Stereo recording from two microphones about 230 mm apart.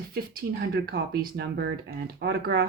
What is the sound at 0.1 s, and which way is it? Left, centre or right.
Speech, right.